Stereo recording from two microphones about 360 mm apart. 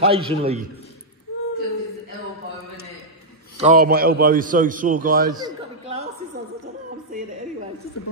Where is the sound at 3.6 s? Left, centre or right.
Right.